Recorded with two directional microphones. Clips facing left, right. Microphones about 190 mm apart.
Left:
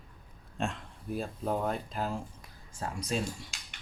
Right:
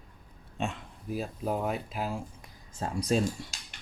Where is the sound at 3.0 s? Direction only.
40° right (ahead or behind).